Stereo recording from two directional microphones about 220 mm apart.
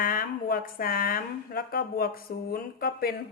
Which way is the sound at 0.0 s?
40° left (ahead or behind).